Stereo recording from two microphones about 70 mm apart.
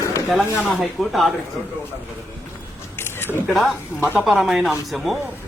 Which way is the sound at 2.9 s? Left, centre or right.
Left.